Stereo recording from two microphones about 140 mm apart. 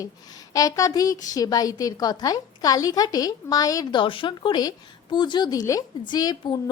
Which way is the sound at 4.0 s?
35° left (ahead or behind).